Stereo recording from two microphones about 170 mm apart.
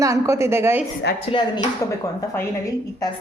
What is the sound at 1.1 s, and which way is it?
Speech, 70° left (ahead or behind).